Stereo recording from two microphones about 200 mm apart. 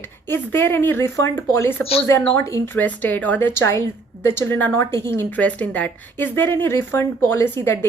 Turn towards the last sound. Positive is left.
turn(degrees=10)  # may be behind; listen again after turning